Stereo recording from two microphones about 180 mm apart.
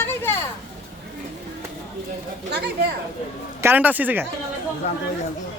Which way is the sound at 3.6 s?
10° right (ahead or behind).